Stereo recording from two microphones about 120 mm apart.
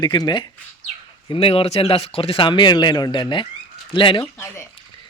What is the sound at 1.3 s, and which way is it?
Speech, 50° left (ahead or behind).